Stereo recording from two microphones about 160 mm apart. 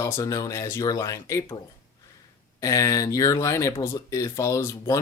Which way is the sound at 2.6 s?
20° left (ahead or behind).